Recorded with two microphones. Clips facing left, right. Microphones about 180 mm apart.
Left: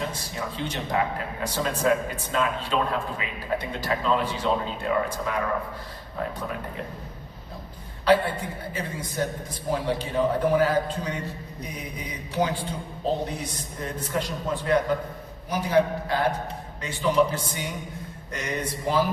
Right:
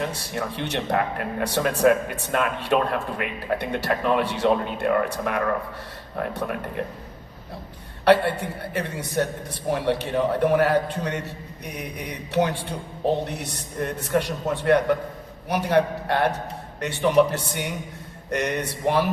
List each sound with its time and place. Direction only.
0.0 s speech: 65° right (ahead or behind)
8.0 s a man's voice: 70° right (ahead or behind)